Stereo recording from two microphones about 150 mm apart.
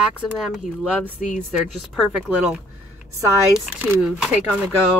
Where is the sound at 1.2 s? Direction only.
55° left (ahead or behind).